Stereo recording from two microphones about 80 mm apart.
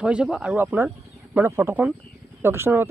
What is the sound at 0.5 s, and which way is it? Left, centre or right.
Speech, right.